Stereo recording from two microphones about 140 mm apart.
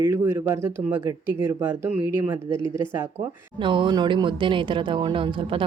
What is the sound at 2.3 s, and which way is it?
Speech, 25° right (ahead or behind).